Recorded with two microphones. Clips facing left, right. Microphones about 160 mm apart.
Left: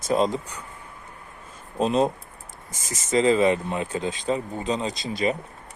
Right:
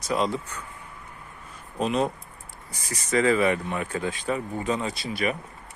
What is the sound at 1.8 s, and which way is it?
Speech, 30° left (ahead or behind).